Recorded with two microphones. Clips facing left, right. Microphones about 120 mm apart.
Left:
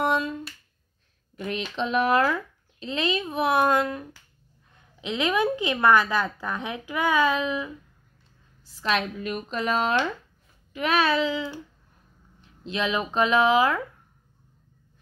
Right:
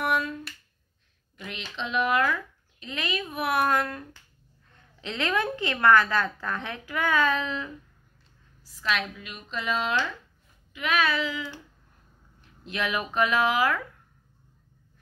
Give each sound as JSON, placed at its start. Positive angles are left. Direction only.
{"t": 0.0, "sound": "finger snapping", "side_deg": 25}
{"t": 1.3, "sound": "a woman's voice", "side_deg": 40}
{"t": 8.6, "sound": "a woman's voice", "side_deg": 35}